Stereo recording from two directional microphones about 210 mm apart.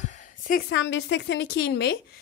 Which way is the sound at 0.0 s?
35° left (ahead or behind).